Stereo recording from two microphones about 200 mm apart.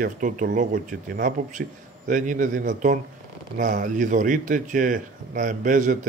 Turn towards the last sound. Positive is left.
turn(degrees=-40)  # may be behind; listen again after turning